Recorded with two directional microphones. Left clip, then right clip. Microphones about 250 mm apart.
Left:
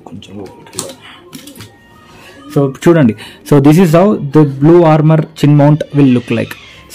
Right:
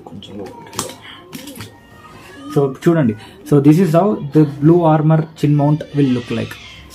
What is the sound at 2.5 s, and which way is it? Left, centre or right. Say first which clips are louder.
Speech: left 5 dB; left.